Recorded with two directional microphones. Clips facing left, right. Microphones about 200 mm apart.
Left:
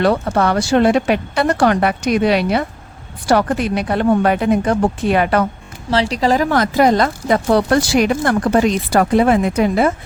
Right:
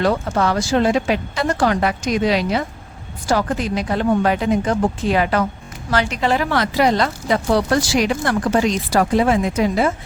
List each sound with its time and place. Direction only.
0.0 s a woman's voice: 65° left (ahead or behind)
5.9 s speech: 30° left (ahead or behind); by 9.9 s 55° left (ahead or behind)